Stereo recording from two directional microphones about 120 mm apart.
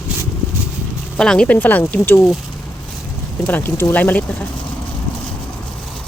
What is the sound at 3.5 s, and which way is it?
Speech, 15° left (ahead or behind).